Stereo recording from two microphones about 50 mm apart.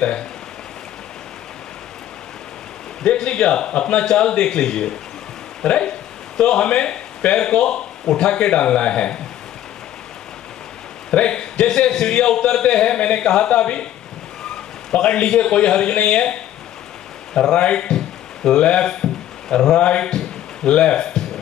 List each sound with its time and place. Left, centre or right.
3.0 s a man's voice: centre
11.1 s a man's voice: left
14.9 s a man's voice: centre